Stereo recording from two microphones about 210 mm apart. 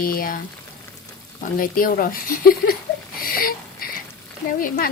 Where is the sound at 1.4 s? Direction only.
40° left (ahead or behind).